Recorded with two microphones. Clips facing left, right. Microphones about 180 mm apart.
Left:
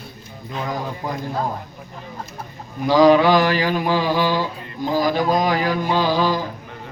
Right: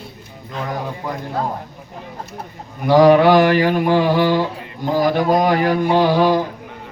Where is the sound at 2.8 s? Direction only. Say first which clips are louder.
Right 3 dB; 60° right (ahead or behind).